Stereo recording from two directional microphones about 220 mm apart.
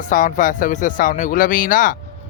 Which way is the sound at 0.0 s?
35° left (ahead or behind).